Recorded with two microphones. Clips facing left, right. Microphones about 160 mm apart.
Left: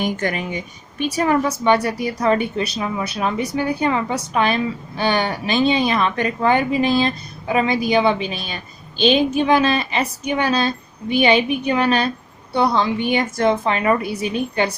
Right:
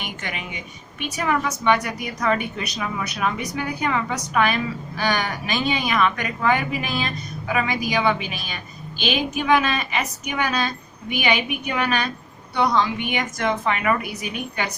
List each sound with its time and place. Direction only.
0.0 s a woman's voice: 40° left (ahead or behind)